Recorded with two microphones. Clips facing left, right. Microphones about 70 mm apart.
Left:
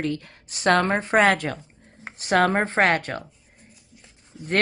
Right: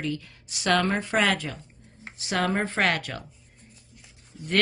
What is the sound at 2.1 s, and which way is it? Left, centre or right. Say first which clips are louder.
Speech: left 6 dB; left.